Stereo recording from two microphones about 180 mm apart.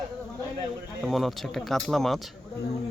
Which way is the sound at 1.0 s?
Centre (ahead or behind).